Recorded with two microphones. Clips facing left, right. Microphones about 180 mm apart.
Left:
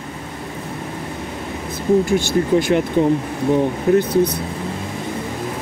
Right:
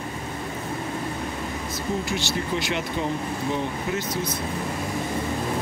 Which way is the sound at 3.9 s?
60° left (ahead or behind).